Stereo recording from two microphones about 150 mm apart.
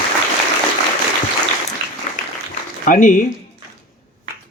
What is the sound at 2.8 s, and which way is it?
Speech, 60° left (ahead or behind).